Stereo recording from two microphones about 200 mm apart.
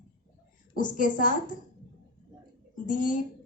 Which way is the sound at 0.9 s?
40° left (ahead or behind).